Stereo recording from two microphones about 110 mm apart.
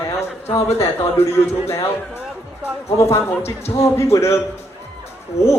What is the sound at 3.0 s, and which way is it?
Speech, 25° left (ahead or behind).